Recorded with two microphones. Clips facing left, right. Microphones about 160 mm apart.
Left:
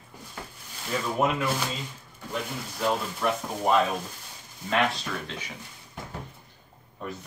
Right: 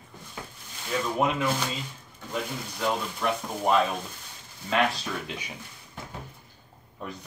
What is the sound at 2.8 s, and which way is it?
Speech, centre (ahead or behind).